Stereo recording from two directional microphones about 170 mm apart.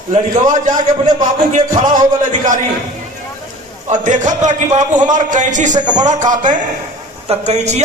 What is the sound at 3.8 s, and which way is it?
A man's voice, 45° right (ahead or behind).